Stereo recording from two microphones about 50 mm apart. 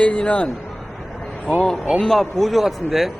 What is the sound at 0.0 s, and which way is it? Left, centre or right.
Speech, left.